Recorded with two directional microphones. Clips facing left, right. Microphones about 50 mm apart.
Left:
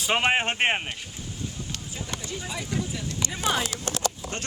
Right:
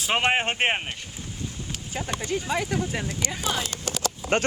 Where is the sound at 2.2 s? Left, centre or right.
Right.